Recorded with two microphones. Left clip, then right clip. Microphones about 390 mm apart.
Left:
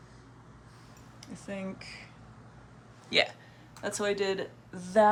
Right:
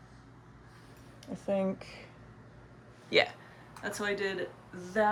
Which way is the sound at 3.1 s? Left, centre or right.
Centre.